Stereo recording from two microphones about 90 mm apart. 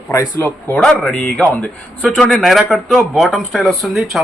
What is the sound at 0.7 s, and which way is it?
Speech, 10° left (ahead or behind).